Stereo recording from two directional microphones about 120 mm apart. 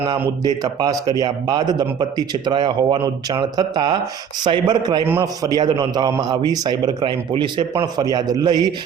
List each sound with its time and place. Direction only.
0.4 s speech: 35° right (ahead or behind)